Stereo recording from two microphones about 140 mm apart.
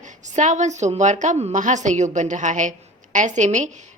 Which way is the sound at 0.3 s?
60° right (ahead or behind).